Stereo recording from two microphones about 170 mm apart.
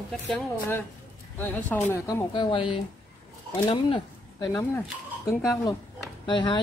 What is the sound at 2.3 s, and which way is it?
Speech, 30° left (ahead or behind).